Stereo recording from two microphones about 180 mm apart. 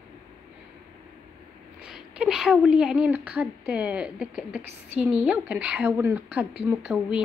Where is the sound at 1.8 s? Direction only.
5° right (ahead or behind).